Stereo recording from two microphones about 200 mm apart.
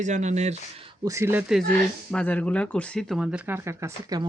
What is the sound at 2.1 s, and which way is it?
Speech, 5° left (ahead or behind).